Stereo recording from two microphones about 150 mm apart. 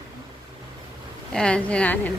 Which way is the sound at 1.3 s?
5° left (ahead or behind).